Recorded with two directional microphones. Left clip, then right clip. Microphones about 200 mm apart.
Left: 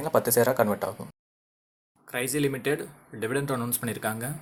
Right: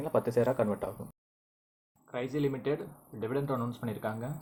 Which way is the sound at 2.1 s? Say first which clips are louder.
Left 5 dB; 15° left (ahead or behind).